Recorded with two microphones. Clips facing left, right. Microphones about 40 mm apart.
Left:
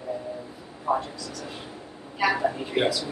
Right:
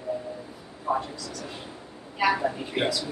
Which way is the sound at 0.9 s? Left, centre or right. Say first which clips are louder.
Left 2 dB; centre.